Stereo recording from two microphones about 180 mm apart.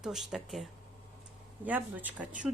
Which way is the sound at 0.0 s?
Centre (ahead or behind).